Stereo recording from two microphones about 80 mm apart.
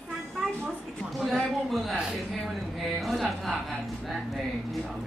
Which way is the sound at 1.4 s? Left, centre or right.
Centre.